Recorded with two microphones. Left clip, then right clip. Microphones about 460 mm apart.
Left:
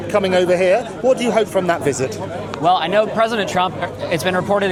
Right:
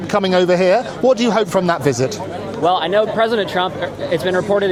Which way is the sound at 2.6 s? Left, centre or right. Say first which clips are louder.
Even; centre.